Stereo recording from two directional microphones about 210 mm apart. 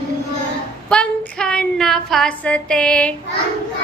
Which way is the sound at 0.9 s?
5° left (ahead or behind).